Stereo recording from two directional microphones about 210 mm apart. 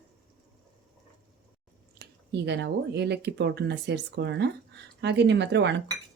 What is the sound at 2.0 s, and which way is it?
Speech, 55° right (ahead or behind).